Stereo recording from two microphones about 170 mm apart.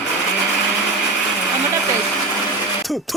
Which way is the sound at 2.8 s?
Centre (ahead or behind).